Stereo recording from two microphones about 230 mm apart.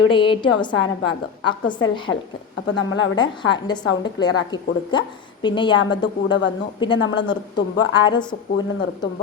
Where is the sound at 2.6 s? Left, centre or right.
Left.